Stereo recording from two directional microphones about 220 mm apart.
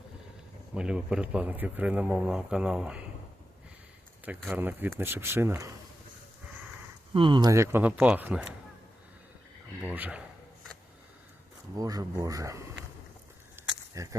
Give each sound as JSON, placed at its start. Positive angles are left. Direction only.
{"t": 0.7, "sound": "speech", "side_deg": -5}
{"t": 4.3, "sound": "speech", "side_deg": -5}
{"t": 7.1, "sound": "speech", "side_deg": -20}
{"t": 9.8, "sound": "a sound", "side_deg": -5}
{"t": 11.8, "sound": "speech", "side_deg": -15}
{"t": 13.6, "sound": "a sound", "side_deg": -15}